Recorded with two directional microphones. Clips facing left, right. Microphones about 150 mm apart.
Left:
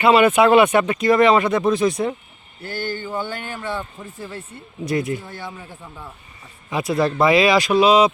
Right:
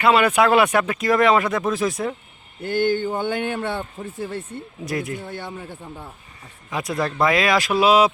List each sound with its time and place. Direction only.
0.0 s speech: centre (ahead or behind)
3.0 s a man's voice: 55° right (ahead or behind)
4.9 s speech: centre (ahead or behind)
6.7 s speech: 5° left (ahead or behind)